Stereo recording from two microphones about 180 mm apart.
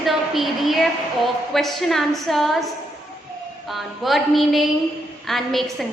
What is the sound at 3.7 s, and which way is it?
A woman's voice, centre (ahead or behind).